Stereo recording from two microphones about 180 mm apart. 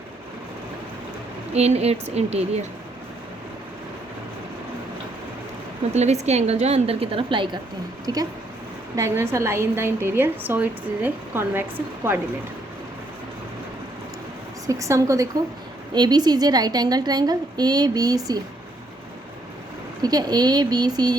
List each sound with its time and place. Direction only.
1.5 s a woman's voice: 35° right (ahead or behind)
5.9 s a woman's voice: 40° right (ahead or behind); by 11.6 s 10° right (ahead or behind)
14.7 s a woman's voice: 15° right (ahead or behind)
20.0 s a woman's voice: 20° right (ahead or behind)